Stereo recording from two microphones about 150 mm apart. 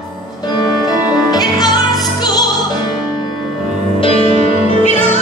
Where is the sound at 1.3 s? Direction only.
25° left (ahead or behind).